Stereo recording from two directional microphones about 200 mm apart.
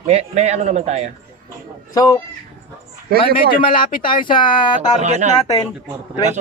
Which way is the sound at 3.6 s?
25° left (ahead or behind).